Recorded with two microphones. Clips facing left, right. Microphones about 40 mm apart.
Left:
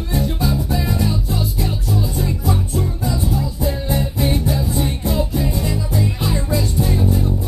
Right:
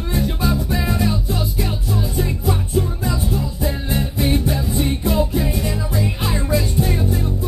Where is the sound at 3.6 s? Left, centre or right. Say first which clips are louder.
Left 1 dB; right.